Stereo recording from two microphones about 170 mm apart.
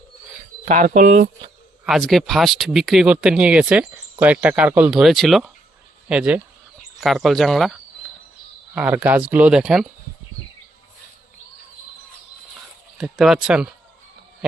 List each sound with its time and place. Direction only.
0.7 s speech: 50° right (ahead or behind)
1.8 s speech: centre (ahead or behind)
8.7 s speech: 10° right (ahead or behind)
13.0 s speech: 5° right (ahead or behind)